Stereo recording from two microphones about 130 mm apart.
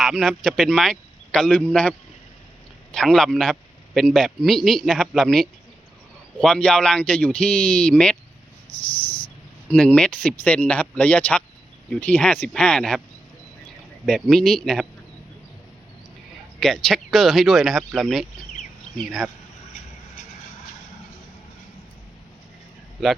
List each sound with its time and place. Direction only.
0.0 s a man's voice: centre (ahead or behind)
9.0 s a sound: 40° left (ahead or behind)
9.6 s speech: 10° left (ahead or behind)
14.0 s a man's voice: 5° left (ahead or behind)
16.6 s a man's voice: 5° left (ahead or behind)